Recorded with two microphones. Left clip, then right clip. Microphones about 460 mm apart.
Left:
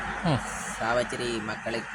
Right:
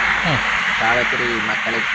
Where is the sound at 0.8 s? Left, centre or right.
Left.